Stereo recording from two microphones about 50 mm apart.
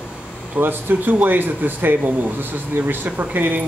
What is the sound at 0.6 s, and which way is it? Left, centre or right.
A man's voice, right.